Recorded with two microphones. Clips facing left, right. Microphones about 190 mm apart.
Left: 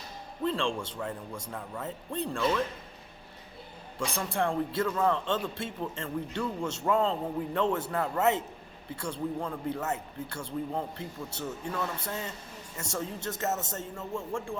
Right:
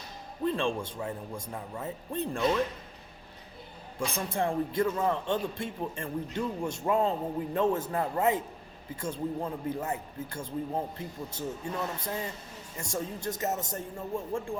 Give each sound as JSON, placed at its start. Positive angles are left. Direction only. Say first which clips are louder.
{"t": 0.4, "sound": "a man's voice", "louder": "right 1 dB", "side_deg": -20}
{"t": 4.0, "sound": "a man's voice", "louder": "even", "side_deg": -15}